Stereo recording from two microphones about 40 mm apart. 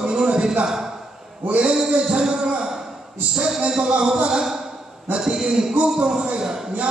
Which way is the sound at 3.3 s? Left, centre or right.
Centre.